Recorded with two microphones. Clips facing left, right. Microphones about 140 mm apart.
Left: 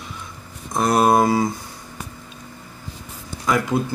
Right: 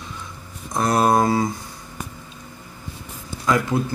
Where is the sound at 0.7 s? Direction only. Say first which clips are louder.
Left 1 dB; 15° left (ahead or behind).